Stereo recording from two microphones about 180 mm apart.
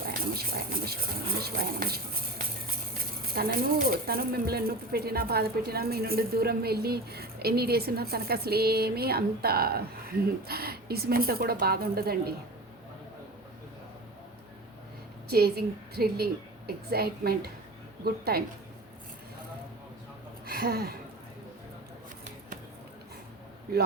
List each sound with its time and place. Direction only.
0.0 s speech: 55° right (ahead or behind)
3.3 s speech: 55° right (ahead or behind)
15.3 s speech: 60° right (ahead or behind)
20.5 s speech: 60° right (ahead or behind)